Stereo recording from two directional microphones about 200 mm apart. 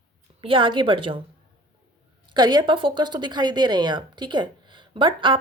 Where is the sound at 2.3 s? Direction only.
20° right (ahead or behind).